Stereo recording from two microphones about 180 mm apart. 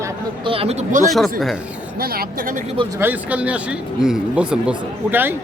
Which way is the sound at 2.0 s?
55° right (ahead or behind).